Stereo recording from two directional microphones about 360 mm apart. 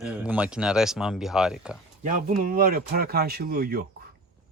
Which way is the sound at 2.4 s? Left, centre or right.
Right.